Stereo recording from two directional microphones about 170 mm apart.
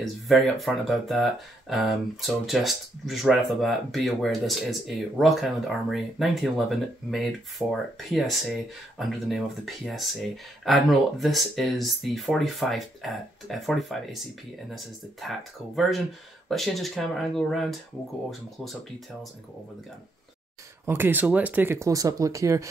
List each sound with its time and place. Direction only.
0.0 s speech: centre (ahead or behind)
15.2 s speech: centre (ahead or behind)
20.8 s speech: 10° right (ahead or behind)